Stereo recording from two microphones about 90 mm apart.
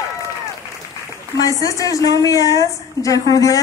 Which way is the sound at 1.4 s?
40° left (ahead or behind).